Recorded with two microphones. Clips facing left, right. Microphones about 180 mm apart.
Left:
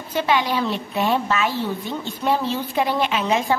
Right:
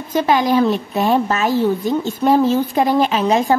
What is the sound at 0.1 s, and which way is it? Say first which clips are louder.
A woman's voice: right 6 dB; 45° right (ahead or behind).